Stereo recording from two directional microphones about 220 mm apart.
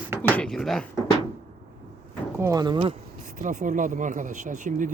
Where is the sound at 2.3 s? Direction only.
15° right (ahead or behind).